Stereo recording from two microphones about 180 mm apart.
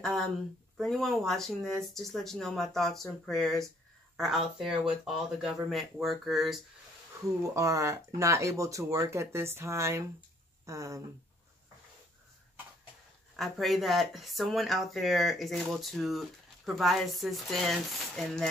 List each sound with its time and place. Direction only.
0.7 s speech: centre (ahead or behind)
7.5 s speech: 15° right (ahead or behind)
13.4 s speech: centre (ahead or behind)